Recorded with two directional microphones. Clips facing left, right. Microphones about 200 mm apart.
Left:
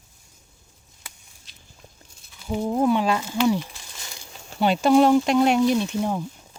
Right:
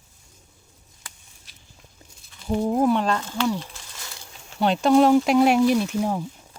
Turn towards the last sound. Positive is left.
turn(degrees=-5)  # may be behind; listen again after turning